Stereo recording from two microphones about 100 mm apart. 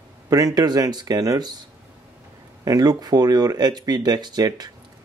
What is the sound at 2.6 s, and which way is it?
Speech, 40° right (ahead or behind).